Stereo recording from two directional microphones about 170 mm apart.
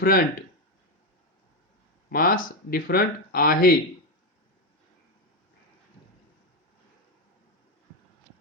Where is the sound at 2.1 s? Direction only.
55° left (ahead or behind).